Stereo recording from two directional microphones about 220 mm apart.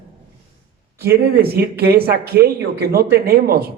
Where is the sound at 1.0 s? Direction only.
45° right (ahead or behind).